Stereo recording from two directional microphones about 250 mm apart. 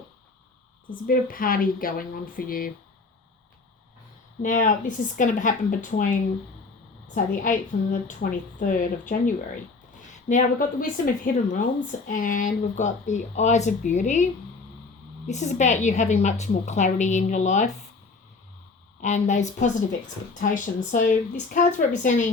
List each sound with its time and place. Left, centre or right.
0.9 s speech: left
4.4 s a woman's voice: left
15.3 s a woman's voice: left
19.0 s a woman's voice: left